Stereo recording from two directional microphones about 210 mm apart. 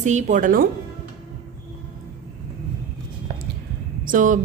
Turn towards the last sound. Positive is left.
turn(degrees=-40)  # may be behind; listen again after turning